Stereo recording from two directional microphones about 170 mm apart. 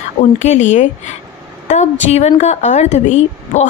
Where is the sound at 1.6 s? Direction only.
40° left (ahead or behind).